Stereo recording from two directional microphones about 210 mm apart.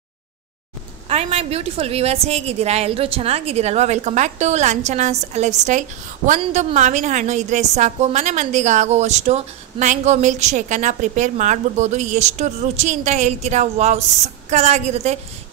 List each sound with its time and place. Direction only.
1.0 s a woman's voice: 30° right (ahead or behind)